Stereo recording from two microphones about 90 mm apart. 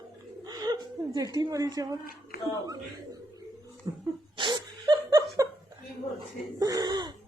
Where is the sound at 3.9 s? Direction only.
50° right (ahead or behind).